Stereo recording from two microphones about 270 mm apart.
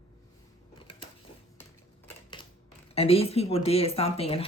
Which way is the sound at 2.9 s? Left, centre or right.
Left.